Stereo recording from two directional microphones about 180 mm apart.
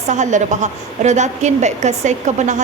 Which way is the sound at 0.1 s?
40° right (ahead or behind).